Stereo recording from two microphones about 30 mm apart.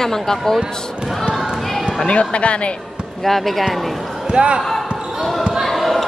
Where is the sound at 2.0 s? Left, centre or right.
Left.